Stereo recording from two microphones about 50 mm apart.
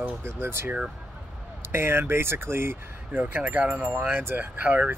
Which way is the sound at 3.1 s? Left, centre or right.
Right.